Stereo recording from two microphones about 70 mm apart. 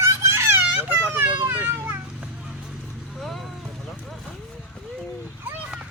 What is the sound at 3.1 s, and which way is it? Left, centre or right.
Vehicle, centre.